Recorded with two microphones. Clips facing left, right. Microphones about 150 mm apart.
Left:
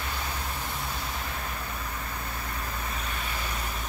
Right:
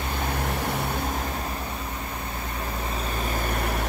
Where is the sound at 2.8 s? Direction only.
35° right (ahead or behind); by 3.8 s 60° right (ahead or behind).